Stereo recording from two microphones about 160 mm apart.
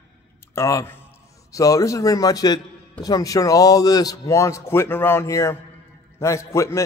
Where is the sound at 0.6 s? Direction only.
20° left (ahead or behind).